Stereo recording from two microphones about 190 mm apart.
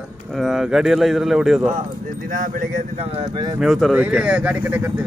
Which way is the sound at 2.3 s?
45° right (ahead or behind).